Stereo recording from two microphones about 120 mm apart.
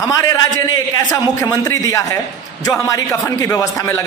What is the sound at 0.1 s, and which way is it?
Speech, 30° left (ahead or behind).